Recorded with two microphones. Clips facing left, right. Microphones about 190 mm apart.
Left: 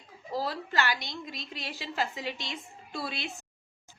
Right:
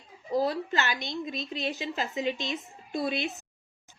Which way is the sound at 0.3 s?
20° right (ahead or behind).